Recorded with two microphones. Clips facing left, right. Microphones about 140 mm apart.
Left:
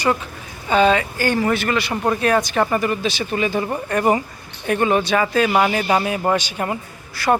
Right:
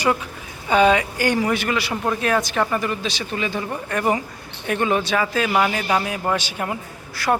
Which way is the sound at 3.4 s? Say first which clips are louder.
Left 5 dB; 50° left (ahead or behind).